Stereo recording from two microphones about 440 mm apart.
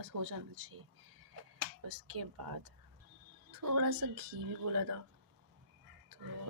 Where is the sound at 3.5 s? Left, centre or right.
Right.